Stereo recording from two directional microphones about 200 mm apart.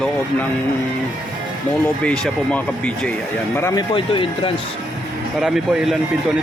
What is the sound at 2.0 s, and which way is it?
Speech, 5° left (ahead or behind).